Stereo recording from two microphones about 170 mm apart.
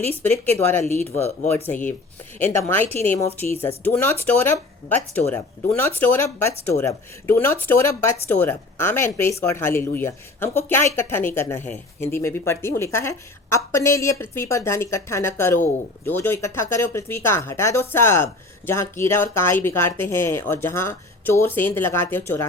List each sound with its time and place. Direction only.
0.2 s speech: 10° left (ahead or behind)